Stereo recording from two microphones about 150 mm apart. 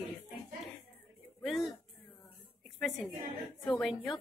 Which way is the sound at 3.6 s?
5° left (ahead or behind).